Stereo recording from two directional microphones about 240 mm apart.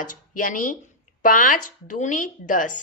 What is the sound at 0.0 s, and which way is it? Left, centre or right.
Speech, left.